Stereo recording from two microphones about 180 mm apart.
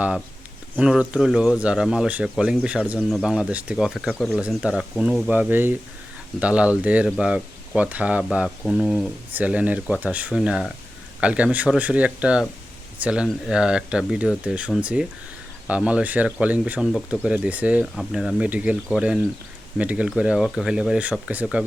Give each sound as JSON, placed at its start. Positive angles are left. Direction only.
{"t": 0.8, "sound": "speech", "side_deg": -5}